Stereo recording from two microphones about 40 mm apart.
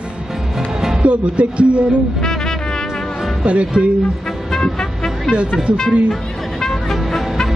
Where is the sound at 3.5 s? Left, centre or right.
Right.